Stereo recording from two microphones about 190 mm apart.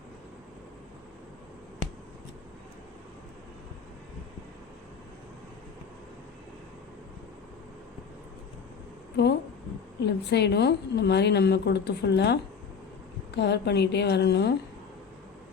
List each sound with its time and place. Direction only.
10.0 s a woman's voice: 60° left (ahead or behind)